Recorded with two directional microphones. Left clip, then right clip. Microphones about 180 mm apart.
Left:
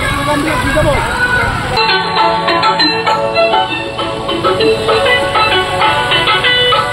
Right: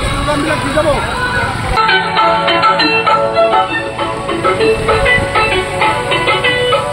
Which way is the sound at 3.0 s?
5° left (ahead or behind).